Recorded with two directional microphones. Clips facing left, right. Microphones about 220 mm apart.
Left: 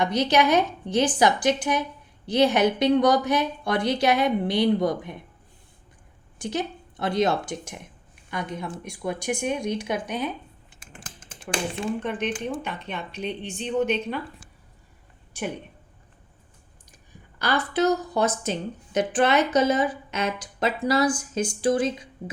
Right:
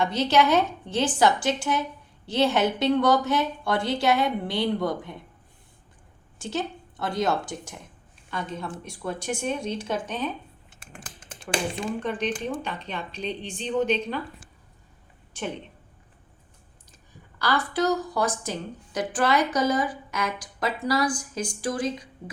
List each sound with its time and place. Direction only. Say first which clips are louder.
0.0 s speech: left 1 dB; 15° left (ahead or behind)
6.4 s speech: left 1 dB; 15° left (ahead or behind)
11.5 s speech: even; centre (ahead or behind)
13.7 s speech: even; 10° left (ahead or behind)
15.3 s a woman's voice: left 1 dB; 10° left (ahead or behind)
17.4 s a woman's voice: left 2 dB; 20° left (ahead or behind)